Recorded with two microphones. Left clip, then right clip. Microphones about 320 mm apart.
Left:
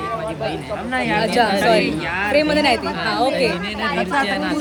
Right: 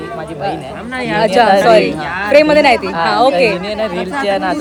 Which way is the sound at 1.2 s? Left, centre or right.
Right.